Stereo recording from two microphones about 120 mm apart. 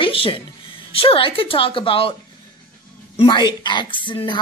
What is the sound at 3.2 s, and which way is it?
Speech, 40° left (ahead or behind).